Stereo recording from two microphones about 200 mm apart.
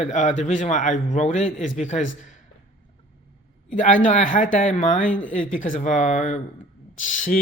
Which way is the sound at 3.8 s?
40° left (ahead or behind).